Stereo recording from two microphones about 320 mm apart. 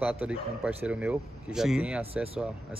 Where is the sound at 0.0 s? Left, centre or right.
Centre.